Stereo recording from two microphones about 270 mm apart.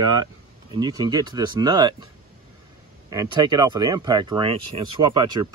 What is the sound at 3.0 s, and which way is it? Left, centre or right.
Speech, centre.